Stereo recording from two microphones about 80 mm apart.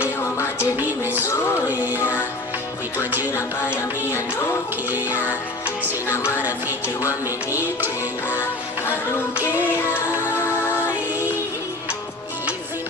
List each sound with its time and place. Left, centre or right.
0.0 s music: left
0.8 s music: right
2.0 s music: left
3.0 s music: right
3.3 s music: left
4.9 s music: right
6.1 s music: left
7.3 s music: right
8.3 s music: left
10.8 s music: right